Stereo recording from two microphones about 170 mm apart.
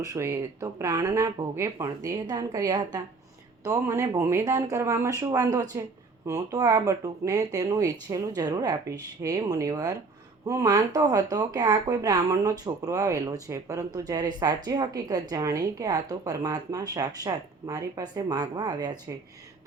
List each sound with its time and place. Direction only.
0.0 s speech: 20° right (ahead or behind)